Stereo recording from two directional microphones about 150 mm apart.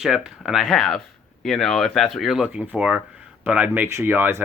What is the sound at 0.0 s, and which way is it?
Speech, 5° right (ahead or behind).